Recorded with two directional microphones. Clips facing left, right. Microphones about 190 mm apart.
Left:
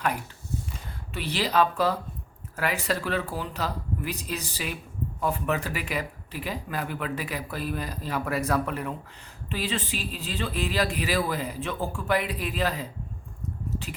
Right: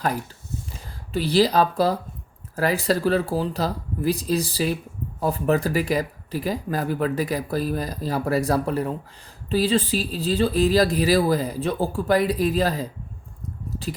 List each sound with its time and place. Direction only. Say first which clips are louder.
0.9 s speech: right 9 dB; 35° right (ahead or behind)